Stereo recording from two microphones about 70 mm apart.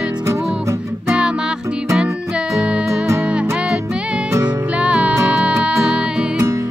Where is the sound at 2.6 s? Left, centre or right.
Centre.